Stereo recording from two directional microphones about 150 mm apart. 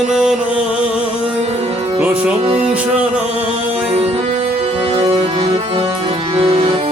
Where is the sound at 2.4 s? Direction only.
35° right (ahead or behind).